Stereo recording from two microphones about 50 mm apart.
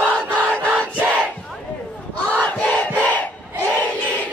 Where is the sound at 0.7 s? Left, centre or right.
Right.